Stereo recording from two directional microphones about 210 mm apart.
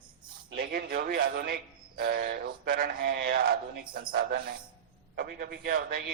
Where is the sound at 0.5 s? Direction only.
50° right (ahead or behind).